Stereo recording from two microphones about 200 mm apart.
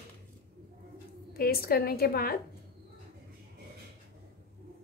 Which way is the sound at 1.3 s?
50° left (ahead or behind).